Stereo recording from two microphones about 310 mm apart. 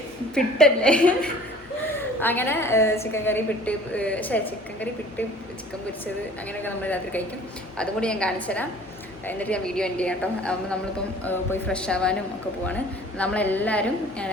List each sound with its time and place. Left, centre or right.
0.3 s a woman's voice: centre
6.5 s a woman's voice: centre